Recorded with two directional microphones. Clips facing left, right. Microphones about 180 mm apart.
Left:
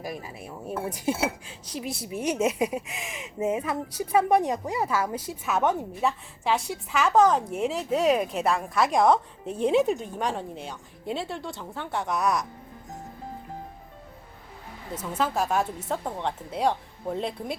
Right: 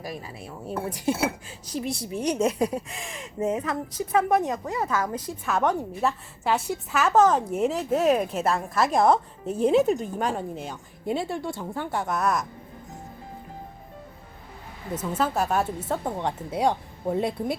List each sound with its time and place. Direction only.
0.1 s speech: 15° left (ahead or behind); by 12.5 s centre (ahead or behind)
15.0 s a woman's voice: 5° right (ahead or behind)